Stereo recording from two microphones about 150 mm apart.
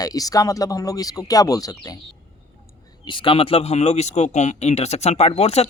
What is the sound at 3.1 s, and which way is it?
Speech, 35° left (ahead or behind).